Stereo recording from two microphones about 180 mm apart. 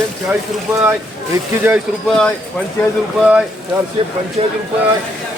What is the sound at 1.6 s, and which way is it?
Speech, centre (ahead or behind).